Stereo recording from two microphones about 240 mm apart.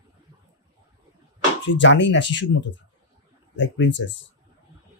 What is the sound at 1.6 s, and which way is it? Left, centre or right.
Speech, left.